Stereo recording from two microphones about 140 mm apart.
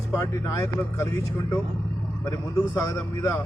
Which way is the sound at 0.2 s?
20° left (ahead or behind).